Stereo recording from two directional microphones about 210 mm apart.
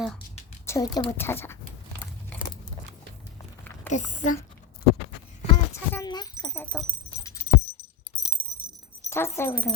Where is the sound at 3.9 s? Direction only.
35° left (ahead or behind).